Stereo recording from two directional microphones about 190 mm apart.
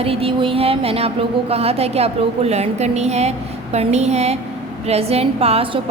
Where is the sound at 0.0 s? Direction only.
30° right (ahead or behind).